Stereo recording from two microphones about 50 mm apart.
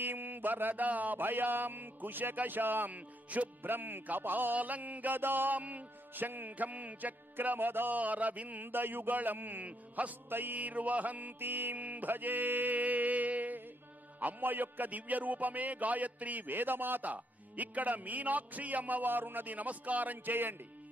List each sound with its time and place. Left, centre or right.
0.0 s music: right
3.7 s music: right
8.0 s music: right